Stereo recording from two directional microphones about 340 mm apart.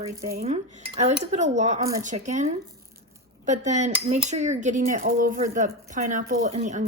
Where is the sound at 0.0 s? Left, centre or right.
Centre.